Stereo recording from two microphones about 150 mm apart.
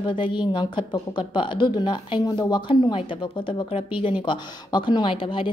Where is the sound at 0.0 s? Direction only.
35° left (ahead or behind).